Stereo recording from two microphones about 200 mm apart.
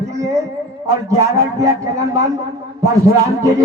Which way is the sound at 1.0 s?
15° right (ahead or behind).